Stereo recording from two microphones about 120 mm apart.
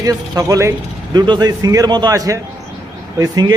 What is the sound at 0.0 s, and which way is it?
A man's voice, 30° right (ahead or behind).